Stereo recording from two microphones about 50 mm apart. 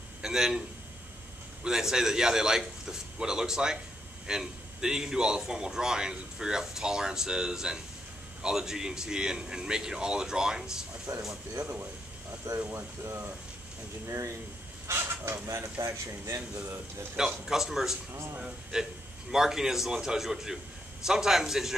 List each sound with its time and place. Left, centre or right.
0.2 s a man's voice: centre
12.6 s speech: right
14.0 s speech: right
15.0 s speech: right
15.4 s speech: right
17.5 s a man's voice: centre